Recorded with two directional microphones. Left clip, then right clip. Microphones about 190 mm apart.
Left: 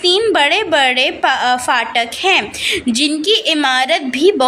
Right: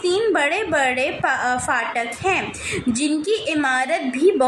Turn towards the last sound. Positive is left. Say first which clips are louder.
# left 5 dB
turn(degrees=30)  # may be behind; listen again after turning